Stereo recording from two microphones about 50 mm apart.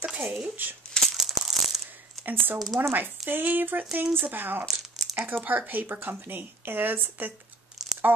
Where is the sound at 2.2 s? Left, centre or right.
Right.